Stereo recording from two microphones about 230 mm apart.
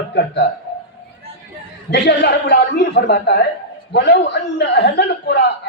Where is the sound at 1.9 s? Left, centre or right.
Left.